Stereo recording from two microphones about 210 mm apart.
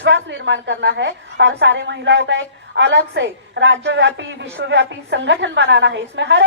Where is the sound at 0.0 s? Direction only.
60° right (ahead or behind).